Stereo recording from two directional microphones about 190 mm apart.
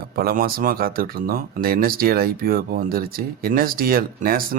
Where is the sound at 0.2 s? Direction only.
50° right (ahead or behind).